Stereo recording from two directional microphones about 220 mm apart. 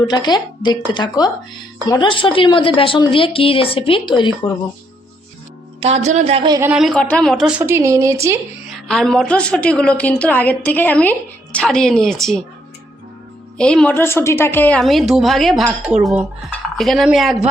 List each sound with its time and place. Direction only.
0.1 s a woman's voice: 20° left (ahead or behind)
5.8 s speech: 30° right (ahead or behind)
6.6 s a woman's voice: 5° right (ahead or behind)
8.7 s a woman's voice: 5° left (ahead or behind)
13.6 s a woman's voice: 5° left (ahead or behind)